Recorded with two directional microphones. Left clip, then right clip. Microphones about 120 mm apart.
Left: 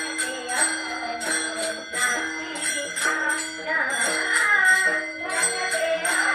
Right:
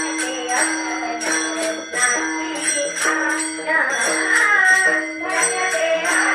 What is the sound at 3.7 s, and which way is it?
Music, 25° right (ahead or behind).